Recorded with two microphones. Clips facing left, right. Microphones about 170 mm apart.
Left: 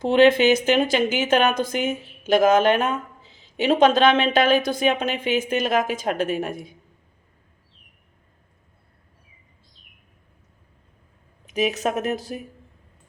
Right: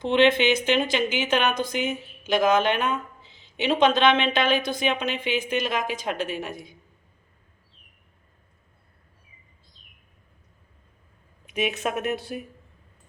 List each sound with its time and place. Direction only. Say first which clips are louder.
0.0 s a woman's voice: left 4 dB; 45° left (ahead or behind)
11.4 s speech: left 4 dB; 35° left (ahead or behind)